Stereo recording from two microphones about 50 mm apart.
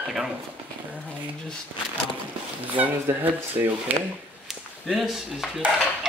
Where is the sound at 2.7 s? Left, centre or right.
Right.